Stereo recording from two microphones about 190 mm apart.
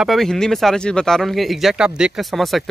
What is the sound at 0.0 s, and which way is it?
Speech, centre (ahead or behind).